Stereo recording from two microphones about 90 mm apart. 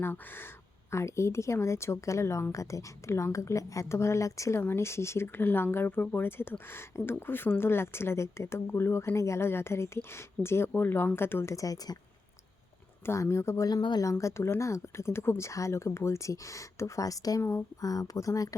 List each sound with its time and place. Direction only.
0.0 s speech: 25° left (ahead or behind)
11.5 s speech: 40° left (ahead or behind)
13.1 s speech: 30° left (ahead or behind)